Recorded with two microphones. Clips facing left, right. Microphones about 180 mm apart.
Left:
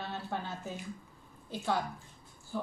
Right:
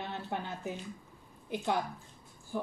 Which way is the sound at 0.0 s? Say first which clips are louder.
Even; 15° right (ahead or behind).